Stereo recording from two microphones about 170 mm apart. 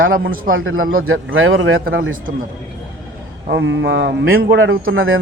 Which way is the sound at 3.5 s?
90° right.